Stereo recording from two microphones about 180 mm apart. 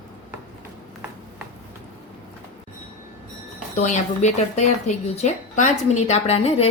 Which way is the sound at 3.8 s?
40° left (ahead or behind).